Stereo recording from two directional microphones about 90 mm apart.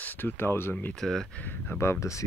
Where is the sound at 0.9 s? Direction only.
5° left (ahead or behind).